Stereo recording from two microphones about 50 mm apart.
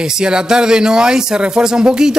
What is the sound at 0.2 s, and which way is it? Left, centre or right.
Speech, centre.